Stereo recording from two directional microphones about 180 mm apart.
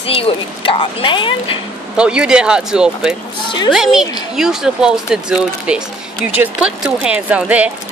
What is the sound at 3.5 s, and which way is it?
Speech, 25° left (ahead or behind).